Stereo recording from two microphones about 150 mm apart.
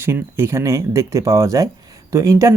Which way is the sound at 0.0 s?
15° right (ahead or behind).